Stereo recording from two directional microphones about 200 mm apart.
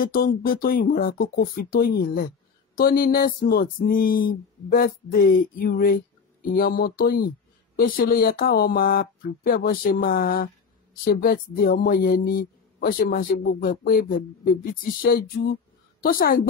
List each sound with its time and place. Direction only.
0.0 s speech: 45° left (ahead or behind)